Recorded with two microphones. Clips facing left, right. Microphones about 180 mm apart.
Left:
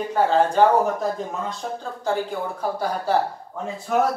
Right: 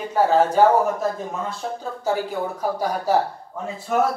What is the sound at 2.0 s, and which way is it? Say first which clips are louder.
Speech: right 1 dB; 10° right (ahead or behind).